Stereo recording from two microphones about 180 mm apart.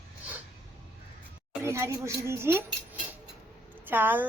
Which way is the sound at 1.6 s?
15° right (ahead or behind).